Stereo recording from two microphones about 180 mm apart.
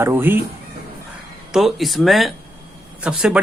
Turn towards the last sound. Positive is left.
turn(degrees=-5)  # may be behind; listen again after turning